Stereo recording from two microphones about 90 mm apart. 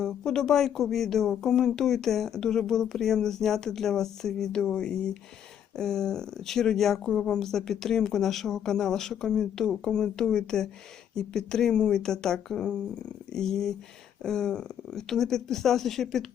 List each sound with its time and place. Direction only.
0.0 s speech: 5° left (ahead or behind)